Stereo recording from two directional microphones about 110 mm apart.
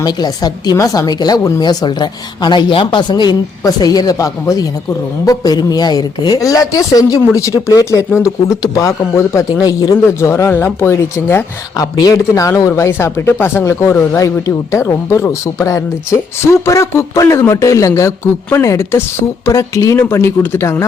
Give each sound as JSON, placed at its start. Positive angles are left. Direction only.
{"t": 0.0, "sound": "speech", "side_deg": 40}
{"t": 11.8, "sound": "speech", "side_deg": 35}